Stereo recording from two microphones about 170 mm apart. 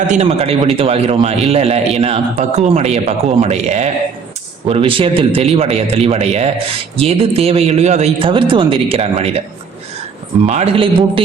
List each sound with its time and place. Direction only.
0.1 s a man's voice: 35° right (ahead or behind)
10.4 s a man's voice: 40° right (ahead or behind)